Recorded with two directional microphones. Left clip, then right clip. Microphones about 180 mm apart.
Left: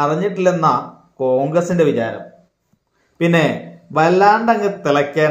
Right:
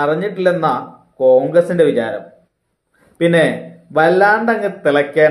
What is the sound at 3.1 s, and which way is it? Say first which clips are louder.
A man's voice: right 3 dB; 25° left (ahead or behind).